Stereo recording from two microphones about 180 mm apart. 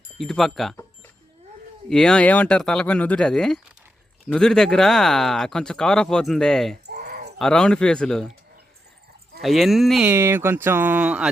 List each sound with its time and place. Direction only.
0.2 s speech: centre (ahead or behind)
1.9 s speech: 5° left (ahead or behind)
6.8 s a sound: 65° right (ahead or behind)
7.3 s speech: 5° left (ahead or behind)
9.4 s speech: centre (ahead or behind)
10.1 s speech: 15° right (ahead or behind)